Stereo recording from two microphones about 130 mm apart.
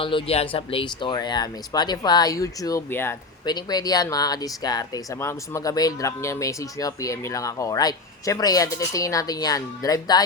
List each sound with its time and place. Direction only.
0.0 s speech: 40° left (ahead or behind); by 3.2 s 20° left (ahead or behind)
3.4 s speech: 30° left (ahead or behind)